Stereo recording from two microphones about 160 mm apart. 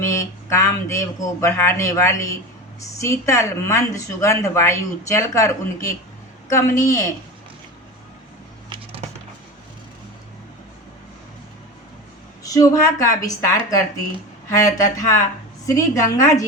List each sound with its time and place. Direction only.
0.0 s a woman's voice: 15° left (ahead or behind)
12.4 s a woman's voice: 20° left (ahead or behind)